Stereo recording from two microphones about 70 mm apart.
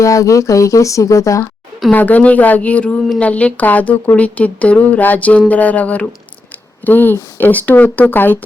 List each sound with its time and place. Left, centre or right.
0.0 s speech: left
1.9 s speech: left